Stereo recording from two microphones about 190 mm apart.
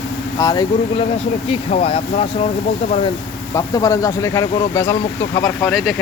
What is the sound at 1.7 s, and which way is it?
Speech, 30° left (ahead or behind).